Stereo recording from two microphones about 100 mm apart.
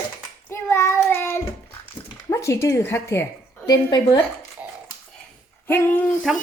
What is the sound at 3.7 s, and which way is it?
Speech, 40° left (ahead or behind).